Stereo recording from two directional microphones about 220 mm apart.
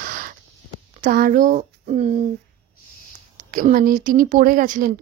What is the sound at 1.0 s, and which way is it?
Speech, 40° right (ahead or behind).